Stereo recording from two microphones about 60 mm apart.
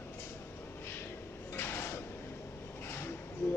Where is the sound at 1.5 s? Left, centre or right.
Left.